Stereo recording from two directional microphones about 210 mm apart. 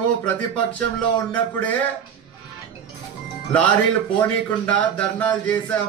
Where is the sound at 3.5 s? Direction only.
5° left (ahead or behind).